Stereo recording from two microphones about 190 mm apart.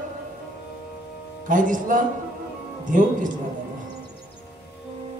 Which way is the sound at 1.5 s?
45° right (ahead or behind).